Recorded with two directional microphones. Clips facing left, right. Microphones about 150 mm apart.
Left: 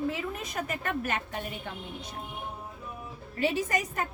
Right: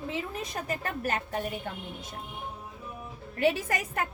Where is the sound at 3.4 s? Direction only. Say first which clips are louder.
Right 1 dB; 55° right (ahead or behind).